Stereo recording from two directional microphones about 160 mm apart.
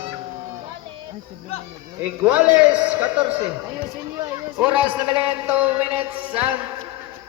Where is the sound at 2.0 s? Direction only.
10° right (ahead or behind).